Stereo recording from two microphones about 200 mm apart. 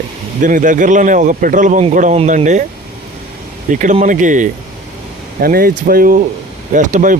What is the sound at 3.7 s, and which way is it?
Speech, 40° right (ahead or behind).